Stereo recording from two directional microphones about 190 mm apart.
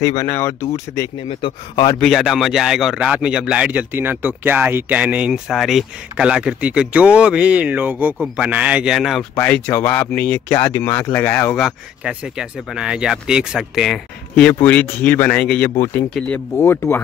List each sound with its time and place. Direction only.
0.0 s speech: 15° left (ahead or behind)
2.0 s speech: centre (ahead or behind)
9.3 s speech: 10° left (ahead or behind)
11.5 s speech: centre (ahead or behind)